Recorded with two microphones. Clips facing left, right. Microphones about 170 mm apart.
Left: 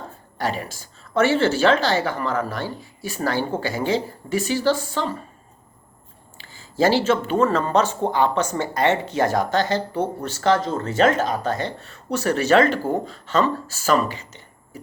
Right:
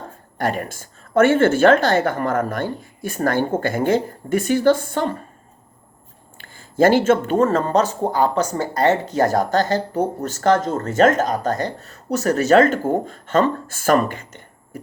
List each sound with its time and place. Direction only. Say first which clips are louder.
0.3 s speech: right 3 dB; 55° right (ahead or behind)
6.3 s speech: right 4 dB; 55° right (ahead or behind)